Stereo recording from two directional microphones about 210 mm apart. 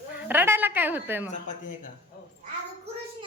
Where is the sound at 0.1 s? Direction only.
10° right (ahead or behind).